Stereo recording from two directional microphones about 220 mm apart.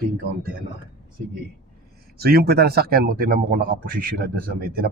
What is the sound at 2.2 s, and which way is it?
Speech, 45° right (ahead or behind).